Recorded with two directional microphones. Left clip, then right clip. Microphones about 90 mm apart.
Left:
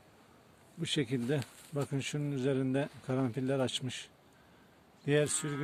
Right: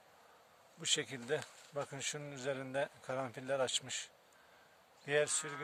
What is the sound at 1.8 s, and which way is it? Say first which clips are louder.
Speech: left 4 dB; 20° left (ahead or behind).